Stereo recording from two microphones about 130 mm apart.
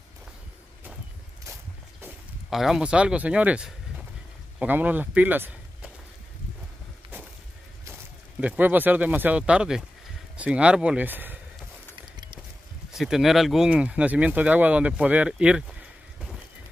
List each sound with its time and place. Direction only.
1.4 s a sound: 20° right (ahead or behind)
2.5 s speech: 5° right (ahead or behind)
7.8 s speech: 15° right (ahead or behind)
12.9 s speech: centre (ahead or behind)